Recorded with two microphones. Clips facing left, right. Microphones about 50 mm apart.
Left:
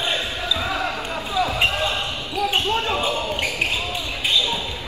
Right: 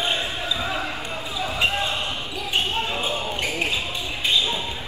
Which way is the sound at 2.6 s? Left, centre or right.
Left.